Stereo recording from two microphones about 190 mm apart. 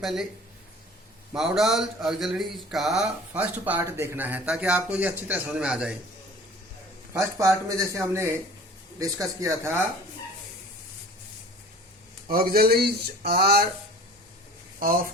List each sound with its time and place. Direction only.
0.0 s speech: centre (ahead or behind)
1.3 s speech: centre (ahead or behind)
7.1 s speech: 15° right (ahead or behind)
12.3 s speech: 50° right (ahead or behind)
14.8 s speech: 50° right (ahead or behind)